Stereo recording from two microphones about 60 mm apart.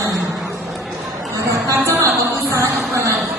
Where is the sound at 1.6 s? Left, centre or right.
Right.